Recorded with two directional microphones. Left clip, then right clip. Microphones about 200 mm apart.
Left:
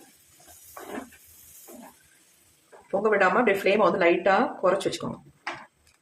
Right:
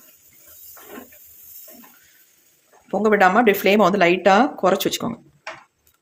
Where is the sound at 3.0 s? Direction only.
45° right (ahead or behind).